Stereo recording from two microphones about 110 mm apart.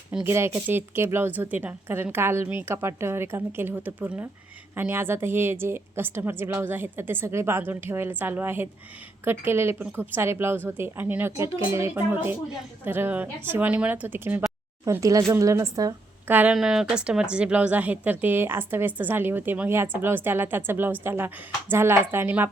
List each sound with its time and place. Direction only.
0.1 s speech: 15° right (ahead or behind)
14.8 s speech: 30° right (ahead or behind)
16.2 s speech: 15° right (ahead or behind)
16.6 s speech: 5° right (ahead or behind)